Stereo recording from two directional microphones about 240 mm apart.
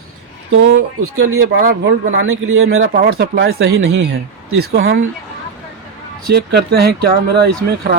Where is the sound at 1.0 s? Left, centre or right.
Right.